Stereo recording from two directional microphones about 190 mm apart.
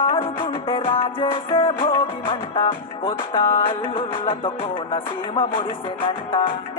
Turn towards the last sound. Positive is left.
turn(degrees=25)  # may be behind; listen again after turning